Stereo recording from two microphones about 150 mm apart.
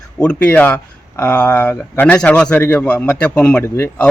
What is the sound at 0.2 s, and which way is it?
A man's voice, 10° left (ahead or behind).